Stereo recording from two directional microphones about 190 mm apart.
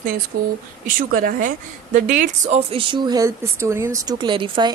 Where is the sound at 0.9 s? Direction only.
50° right (ahead or behind).